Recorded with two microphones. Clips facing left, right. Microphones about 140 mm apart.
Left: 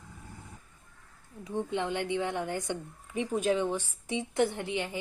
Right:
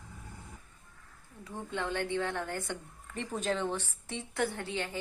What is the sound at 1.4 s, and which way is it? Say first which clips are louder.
A woman's voice: left 5 dB; 20° left (ahead or behind).